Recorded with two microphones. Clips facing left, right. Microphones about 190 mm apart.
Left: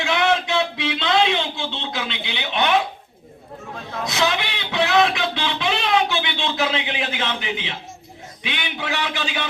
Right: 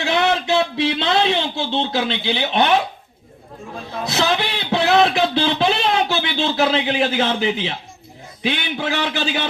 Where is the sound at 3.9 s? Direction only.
30° right (ahead or behind).